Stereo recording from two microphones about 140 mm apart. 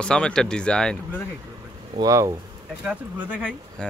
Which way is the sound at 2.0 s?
25° right (ahead or behind).